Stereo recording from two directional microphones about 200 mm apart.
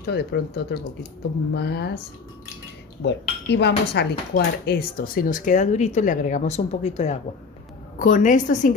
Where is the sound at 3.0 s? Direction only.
60° left (ahead or behind).